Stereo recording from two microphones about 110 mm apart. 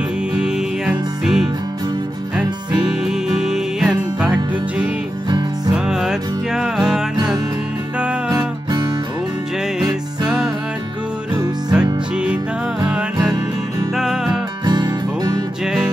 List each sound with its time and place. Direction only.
0.3 s music: 5° right (ahead or behind)
8.3 s music: 35° right (ahead or behind)
10.2 s music: 5° right (ahead or behind)
11.7 s music: 10° right (ahead or behind)
14.6 s music: 40° right (ahead or behind)
15.6 s music: 5° right (ahead or behind)